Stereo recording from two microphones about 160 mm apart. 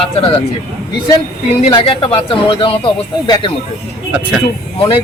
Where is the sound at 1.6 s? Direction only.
35° left (ahead or behind).